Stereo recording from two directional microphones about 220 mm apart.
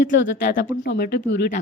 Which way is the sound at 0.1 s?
55° left (ahead or behind).